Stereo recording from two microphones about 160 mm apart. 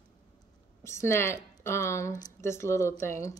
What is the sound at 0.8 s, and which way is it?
Speech, 15° left (ahead or behind).